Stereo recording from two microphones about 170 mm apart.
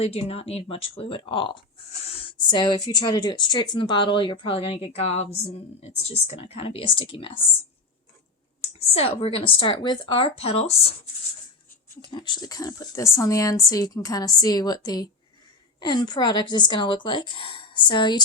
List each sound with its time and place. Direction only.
0.0 s speech: 35° left (ahead or behind)
8.6 s speech: 35° left (ahead or behind)
12.1 s speech: 25° left (ahead or behind)